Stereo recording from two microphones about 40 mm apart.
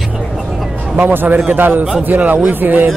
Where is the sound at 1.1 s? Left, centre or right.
Right.